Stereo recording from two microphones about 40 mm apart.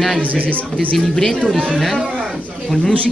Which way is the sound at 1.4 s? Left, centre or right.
Centre.